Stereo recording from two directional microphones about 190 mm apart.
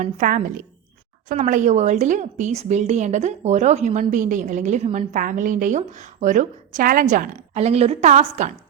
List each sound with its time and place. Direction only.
0.0 s a woman's voice: 40° right (ahead or behind)